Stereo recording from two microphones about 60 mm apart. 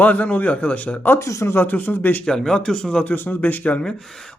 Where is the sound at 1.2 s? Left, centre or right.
Left.